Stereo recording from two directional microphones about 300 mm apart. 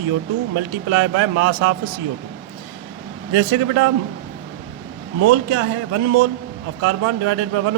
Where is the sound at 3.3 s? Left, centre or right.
Right.